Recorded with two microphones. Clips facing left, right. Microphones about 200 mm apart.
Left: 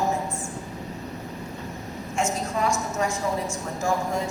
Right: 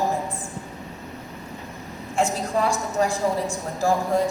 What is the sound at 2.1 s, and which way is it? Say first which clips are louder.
A woman's voice: right 4 dB; 35° right (ahead or behind).